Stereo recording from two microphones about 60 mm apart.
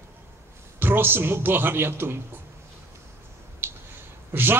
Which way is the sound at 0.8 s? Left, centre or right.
Right.